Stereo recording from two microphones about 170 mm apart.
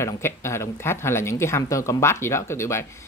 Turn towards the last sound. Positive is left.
turn(degrees=15)  # may be behind; listen again after turning